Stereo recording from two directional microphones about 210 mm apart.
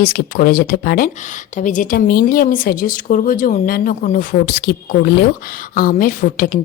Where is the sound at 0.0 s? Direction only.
45° left (ahead or behind).